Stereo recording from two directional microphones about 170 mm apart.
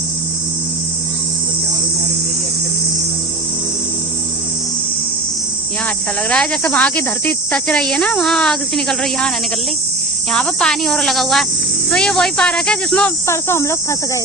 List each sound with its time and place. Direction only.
6.3 s speech: 5° left (ahead or behind)
10.3 s speech: 5° left (ahead or behind)